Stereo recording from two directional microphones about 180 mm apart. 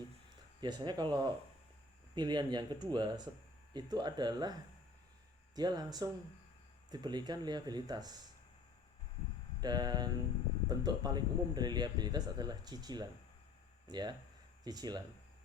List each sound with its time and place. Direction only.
0.6 s speech: 25° right (ahead or behind)
5.5 s speech: 20° right (ahead or behind)
9.6 s speech: 25° right (ahead or behind)